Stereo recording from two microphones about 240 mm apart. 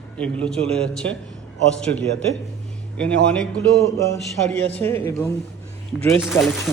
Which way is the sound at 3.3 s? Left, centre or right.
Centre.